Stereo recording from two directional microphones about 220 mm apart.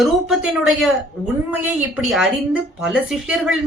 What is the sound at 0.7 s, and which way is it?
A woman's voice, centre (ahead or behind).